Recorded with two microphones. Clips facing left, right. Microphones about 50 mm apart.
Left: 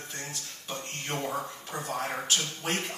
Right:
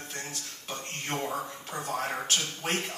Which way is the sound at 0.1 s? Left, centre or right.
Right.